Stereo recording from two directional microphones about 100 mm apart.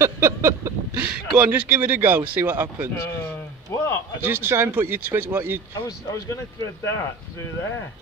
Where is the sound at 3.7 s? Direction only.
25° left (ahead or behind).